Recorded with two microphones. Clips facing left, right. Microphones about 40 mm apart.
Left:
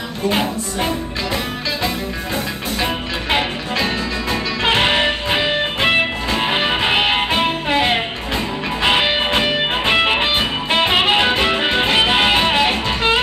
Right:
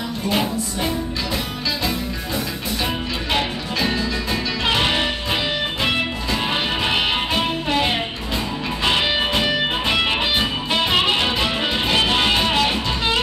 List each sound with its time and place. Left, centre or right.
0.3 s music: left
2.8 s music: left
3.7 s music: left
4.6 s music: left